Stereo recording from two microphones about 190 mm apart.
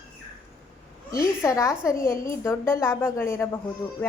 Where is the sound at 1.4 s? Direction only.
15° left (ahead or behind).